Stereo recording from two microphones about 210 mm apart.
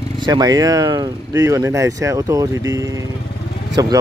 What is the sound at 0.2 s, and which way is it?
Speech, 20° right (ahead or behind).